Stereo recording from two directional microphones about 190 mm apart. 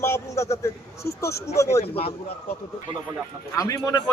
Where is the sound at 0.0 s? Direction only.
15° left (ahead or behind).